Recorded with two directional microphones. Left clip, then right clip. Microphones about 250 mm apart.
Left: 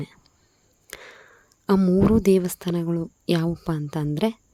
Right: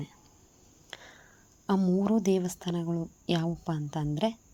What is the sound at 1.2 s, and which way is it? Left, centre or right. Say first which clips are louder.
Speech: left 7 dB; left.